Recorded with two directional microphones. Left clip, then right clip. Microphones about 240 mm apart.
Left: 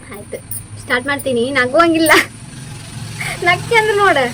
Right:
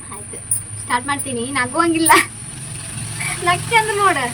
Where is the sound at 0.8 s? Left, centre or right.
Centre.